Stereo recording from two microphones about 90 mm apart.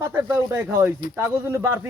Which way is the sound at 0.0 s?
30° right (ahead or behind).